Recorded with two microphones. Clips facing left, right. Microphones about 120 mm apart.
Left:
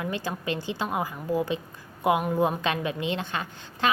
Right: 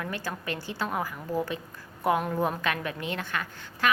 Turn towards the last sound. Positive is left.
turn(degrees=25)  # may be behind; listen again after turning